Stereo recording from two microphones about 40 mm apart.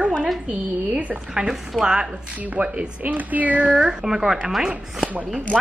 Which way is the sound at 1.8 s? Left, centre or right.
Right.